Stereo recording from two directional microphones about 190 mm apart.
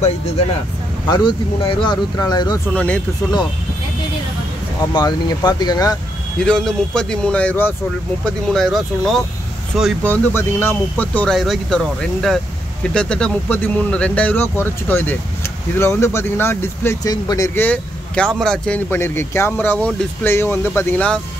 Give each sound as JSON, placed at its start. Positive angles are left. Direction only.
{"t": 1.0, "sound": "speech", "side_deg": 25}
{"t": 2.7, "sound": "speech", "side_deg": 5}
{"t": 4.9, "sound": "speech", "side_deg": 20}
{"t": 6.4, "sound": "speech", "side_deg": 5}